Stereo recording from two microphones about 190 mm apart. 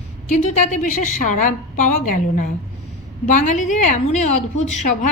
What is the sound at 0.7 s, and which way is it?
A woman's voice, 40° left (ahead or behind).